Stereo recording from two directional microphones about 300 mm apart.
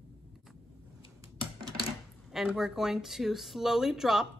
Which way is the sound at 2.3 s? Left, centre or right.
Centre.